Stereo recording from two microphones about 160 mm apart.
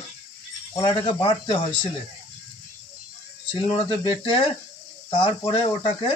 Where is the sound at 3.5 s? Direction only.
35° left (ahead or behind).